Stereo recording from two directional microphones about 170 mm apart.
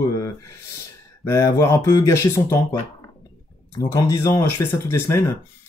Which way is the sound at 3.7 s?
20° left (ahead or behind).